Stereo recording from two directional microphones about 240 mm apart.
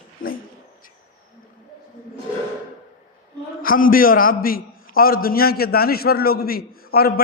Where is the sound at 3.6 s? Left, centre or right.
Left.